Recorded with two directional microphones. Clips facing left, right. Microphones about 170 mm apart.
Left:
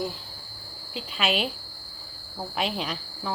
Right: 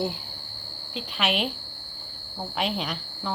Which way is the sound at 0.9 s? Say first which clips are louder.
Even; 5° left (ahead or behind).